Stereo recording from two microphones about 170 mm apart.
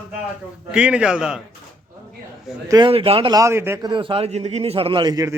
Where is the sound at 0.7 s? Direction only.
5° right (ahead or behind).